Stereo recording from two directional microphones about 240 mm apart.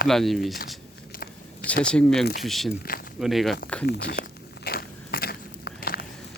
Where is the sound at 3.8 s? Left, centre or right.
Left.